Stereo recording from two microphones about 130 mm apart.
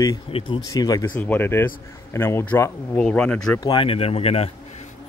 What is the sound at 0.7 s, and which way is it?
Speech, 25° left (ahead or behind).